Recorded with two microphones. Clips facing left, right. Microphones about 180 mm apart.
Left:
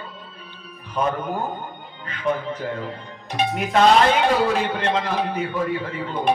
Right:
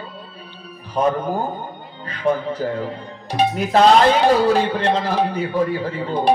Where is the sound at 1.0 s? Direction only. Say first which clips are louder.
Right 4 dB; 35° right (ahead or behind).